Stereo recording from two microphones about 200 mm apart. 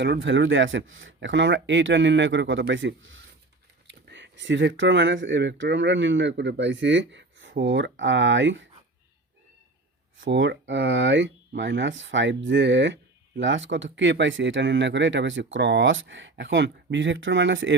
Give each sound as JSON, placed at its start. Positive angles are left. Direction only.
{"t": 0.0, "sound": "speech", "side_deg": -65}
{"t": 10.2, "sound": "speech", "side_deg": -65}